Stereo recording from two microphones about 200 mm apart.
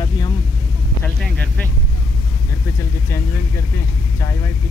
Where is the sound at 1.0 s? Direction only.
5° left (ahead or behind).